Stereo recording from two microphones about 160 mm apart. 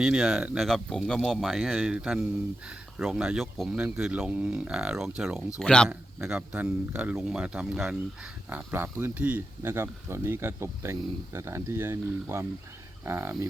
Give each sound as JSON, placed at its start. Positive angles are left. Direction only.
{"t": 0.0, "sound": "speech", "side_deg": -5}
{"t": 5.5, "sound": "speech", "side_deg": 5}
{"t": 5.9, "sound": "speech", "side_deg": -5}